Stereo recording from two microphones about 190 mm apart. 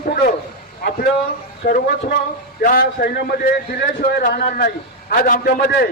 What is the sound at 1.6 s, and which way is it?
A man's voice, 50° left (ahead or behind).